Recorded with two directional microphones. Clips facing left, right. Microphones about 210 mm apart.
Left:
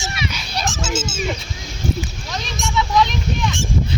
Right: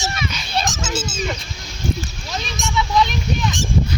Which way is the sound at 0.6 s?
35° right (ahead or behind).